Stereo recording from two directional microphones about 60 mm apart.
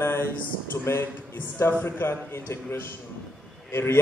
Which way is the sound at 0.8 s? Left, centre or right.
Left.